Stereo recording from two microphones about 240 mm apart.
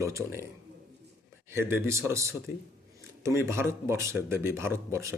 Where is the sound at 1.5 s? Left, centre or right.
Centre.